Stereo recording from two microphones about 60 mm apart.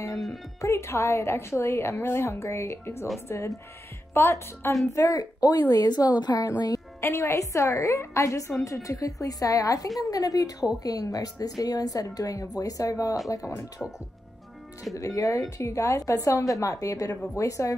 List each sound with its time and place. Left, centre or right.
0.6 s a woman's voice: left
2.8 s a woman's voice: left
3.3 s a woman's voice: left
4.1 s a woman's voice: left
4.9 s a woman's voice: left
7.0 s a woman's voice: left
10.8 s a woman's voice: left
11.6 s a woman's voice: left
15.0 s a woman's voice: left